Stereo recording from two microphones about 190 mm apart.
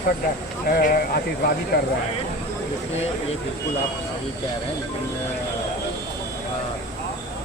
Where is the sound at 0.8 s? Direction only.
50° left (ahead or behind).